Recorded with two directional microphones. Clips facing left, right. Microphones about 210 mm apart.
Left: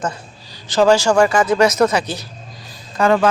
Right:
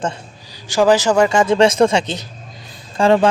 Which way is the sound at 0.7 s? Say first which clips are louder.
Even; 15° right (ahead or behind).